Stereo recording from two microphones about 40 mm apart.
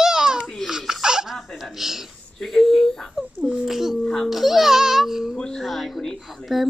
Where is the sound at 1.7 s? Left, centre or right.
Centre.